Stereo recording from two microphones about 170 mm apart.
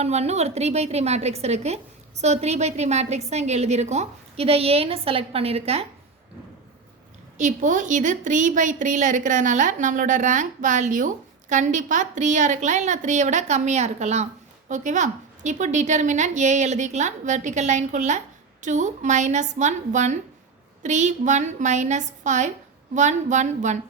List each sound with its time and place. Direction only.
0.0 s a woman's voice: 40° right (ahead or behind)
7.3 s a woman's voice: 45° right (ahead or behind)